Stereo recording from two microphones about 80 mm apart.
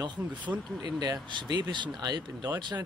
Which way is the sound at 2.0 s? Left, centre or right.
Right.